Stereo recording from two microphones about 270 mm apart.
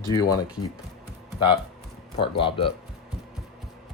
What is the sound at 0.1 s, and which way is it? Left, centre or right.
Speech, centre.